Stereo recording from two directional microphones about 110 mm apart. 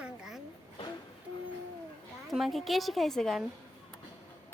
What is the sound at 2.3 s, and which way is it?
Speech, centre (ahead or behind).